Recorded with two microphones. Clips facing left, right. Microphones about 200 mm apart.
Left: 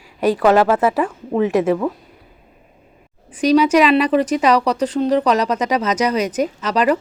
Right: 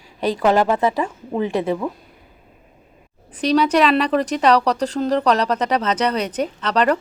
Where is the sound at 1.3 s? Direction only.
30° right (ahead or behind).